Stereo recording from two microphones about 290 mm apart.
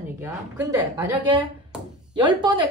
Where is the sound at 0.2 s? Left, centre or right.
Centre.